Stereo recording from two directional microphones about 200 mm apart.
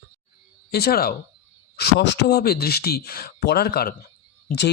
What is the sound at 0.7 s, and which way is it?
Speech, 50° left (ahead or behind).